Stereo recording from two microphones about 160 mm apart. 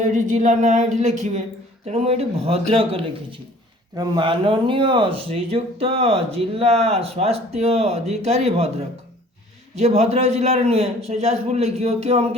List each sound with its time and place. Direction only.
0.0 s speech: 55° right (ahead or behind)